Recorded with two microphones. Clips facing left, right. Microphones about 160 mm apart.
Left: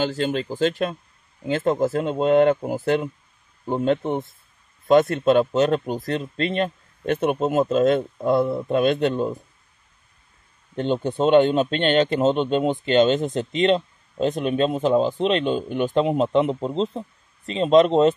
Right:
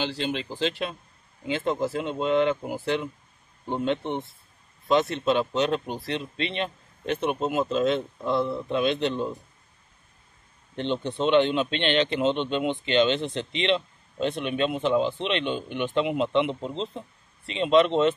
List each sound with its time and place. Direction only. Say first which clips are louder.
0.0 s speech: left 6 dB; 45° left (ahead or behind)
10.8 s speech: left 5 dB; 45° left (ahead or behind)